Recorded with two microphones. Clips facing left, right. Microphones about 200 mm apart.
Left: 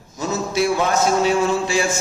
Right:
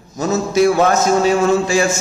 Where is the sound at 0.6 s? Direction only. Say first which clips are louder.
Right 7 dB; 45° right (ahead or behind).